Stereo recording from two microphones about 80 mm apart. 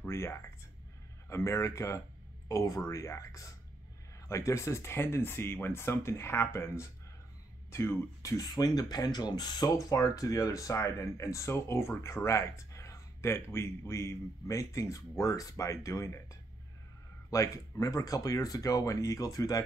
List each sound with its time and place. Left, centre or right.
0.0 s a sound: left
1.3 s speech: left
8.5 s speech: left